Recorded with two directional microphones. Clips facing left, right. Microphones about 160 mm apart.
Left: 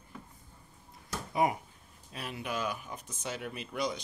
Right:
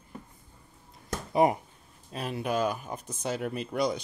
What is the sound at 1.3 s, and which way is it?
Speech, 35° right (ahead or behind).